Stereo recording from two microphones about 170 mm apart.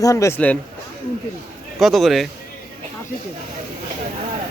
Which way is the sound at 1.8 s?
Centre (ahead or behind).